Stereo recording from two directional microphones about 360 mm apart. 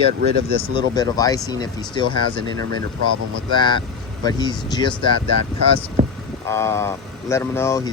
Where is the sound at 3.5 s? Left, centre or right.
Centre.